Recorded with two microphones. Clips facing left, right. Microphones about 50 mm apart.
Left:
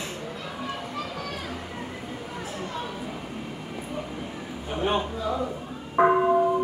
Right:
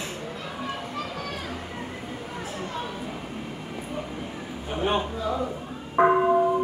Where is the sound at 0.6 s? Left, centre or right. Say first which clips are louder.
Right 1 dB; centre.